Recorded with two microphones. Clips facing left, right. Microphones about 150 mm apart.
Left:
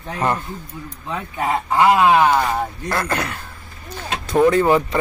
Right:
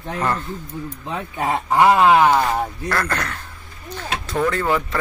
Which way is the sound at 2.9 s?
15° left (ahead or behind).